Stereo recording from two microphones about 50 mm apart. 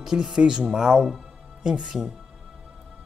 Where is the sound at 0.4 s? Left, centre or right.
Centre.